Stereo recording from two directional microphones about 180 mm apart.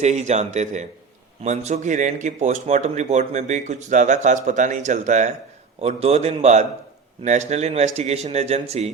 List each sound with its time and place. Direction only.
0.0 s a man's voice: 40° right (ahead or behind)